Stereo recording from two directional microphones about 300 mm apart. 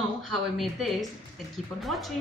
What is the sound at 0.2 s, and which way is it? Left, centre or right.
A man's voice, centre.